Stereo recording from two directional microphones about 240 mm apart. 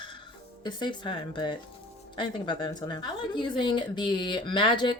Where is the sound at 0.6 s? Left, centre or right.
Centre.